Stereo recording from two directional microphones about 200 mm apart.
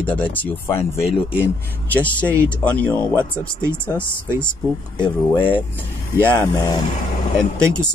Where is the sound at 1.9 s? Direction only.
5° left (ahead or behind).